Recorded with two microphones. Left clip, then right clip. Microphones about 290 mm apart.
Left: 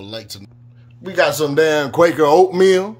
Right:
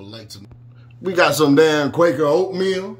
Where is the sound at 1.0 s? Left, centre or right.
Centre.